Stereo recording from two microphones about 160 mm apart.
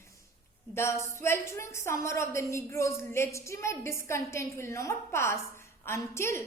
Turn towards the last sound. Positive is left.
turn(degrees=15)  # may be behind; listen again after turning